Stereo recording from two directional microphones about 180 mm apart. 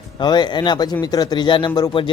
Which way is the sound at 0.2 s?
25° left (ahead or behind).